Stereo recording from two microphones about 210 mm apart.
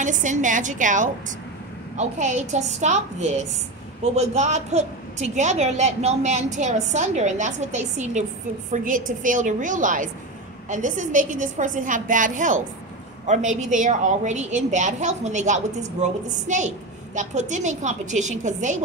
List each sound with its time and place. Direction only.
0.0 s a woman's voice: 35° right (ahead or behind)